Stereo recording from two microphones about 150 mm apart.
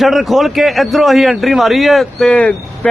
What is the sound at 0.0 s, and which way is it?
A man's voice, centre (ahead or behind).